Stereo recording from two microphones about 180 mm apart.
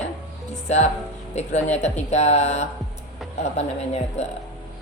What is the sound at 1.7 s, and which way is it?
Speech, 40° left (ahead or behind).